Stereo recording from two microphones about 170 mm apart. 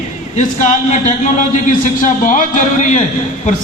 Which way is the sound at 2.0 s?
50° left (ahead or behind).